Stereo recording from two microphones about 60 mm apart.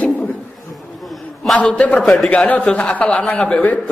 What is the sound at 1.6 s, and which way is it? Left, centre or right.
A man's voice, left.